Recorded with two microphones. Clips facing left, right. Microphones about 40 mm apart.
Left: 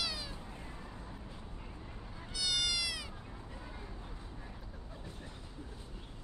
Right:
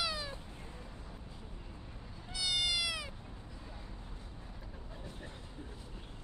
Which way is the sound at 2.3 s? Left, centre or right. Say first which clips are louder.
Right 1 dB; centre.